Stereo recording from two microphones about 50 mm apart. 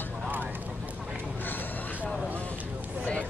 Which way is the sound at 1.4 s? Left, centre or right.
Left.